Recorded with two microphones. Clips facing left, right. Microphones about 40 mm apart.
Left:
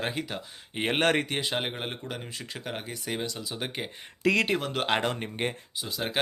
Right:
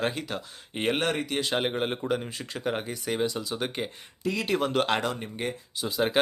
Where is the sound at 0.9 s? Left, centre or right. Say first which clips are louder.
Left 3 dB; left.